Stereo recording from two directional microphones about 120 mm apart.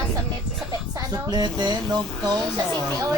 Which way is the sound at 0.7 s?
35° right (ahead or behind).